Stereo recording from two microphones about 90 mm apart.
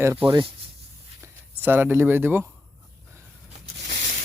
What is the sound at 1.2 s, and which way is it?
Speech, 25° right (ahead or behind).